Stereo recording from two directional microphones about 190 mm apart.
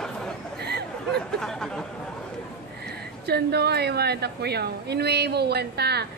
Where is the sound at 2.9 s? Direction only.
60° right (ahead or behind).